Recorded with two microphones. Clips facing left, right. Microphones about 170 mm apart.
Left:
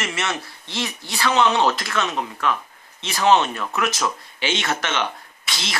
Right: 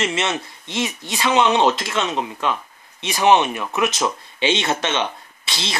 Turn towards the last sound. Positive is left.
turn(degrees=-25)  # may be behind; listen again after turning